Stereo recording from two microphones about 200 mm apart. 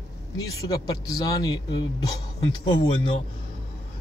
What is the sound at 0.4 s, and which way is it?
A man's voice, 20° left (ahead or behind).